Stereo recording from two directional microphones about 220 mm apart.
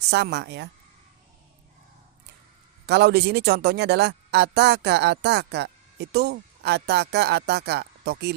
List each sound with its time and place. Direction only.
0.1 s speech: 50° right (ahead or behind)
2.8 s speech: 50° right (ahead or behind)